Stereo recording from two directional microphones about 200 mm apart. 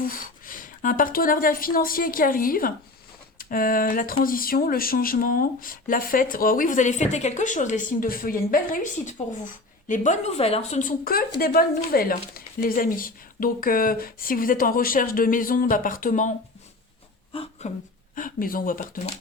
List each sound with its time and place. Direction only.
0.0 s speech: 45° left (ahead or behind)
17.3 s a sound: 30° left (ahead or behind)
18.1 s speech: 45° left (ahead or behind)